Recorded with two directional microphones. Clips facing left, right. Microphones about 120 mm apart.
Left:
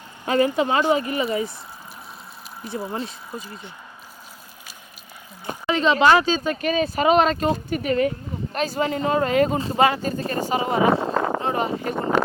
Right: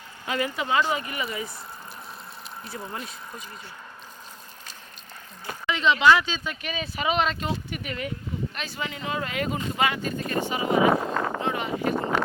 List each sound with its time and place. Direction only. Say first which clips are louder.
0.3 s speech: left 7 dB; 35° left (ahead or behind)
2.9 s speech: left 6 dB; 30° left (ahead or behind)
5.6 s speech: left 3 dB; 40° left (ahead or behind)